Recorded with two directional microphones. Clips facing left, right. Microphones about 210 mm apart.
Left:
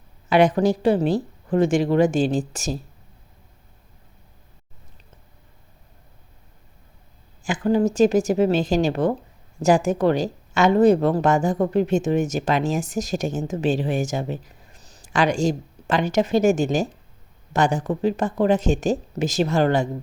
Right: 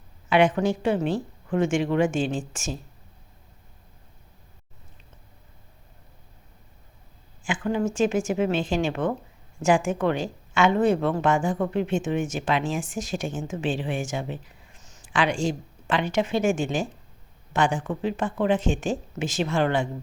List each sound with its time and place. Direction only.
0.3 s speech: 40° left (ahead or behind)
7.4 s speech: 40° left (ahead or behind)